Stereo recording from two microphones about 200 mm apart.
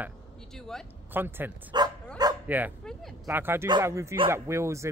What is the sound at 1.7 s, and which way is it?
Dog, 20° right (ahead or behind).